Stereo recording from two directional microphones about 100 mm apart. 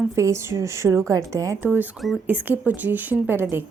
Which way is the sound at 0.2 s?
30° right (ahead or behind).